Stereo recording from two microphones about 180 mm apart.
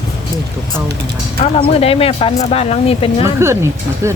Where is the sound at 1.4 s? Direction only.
30° left (ahead or behind).